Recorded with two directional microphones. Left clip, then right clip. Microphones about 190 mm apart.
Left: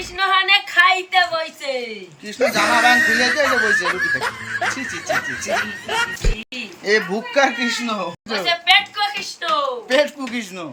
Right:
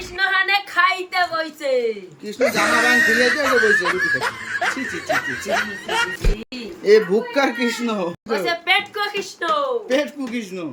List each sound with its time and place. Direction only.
0.2 s a sound: 25° right (ahead or behind)
2.4 s speech: centre (ahead or behind)
9.9 s speech: centre (ahead or behind)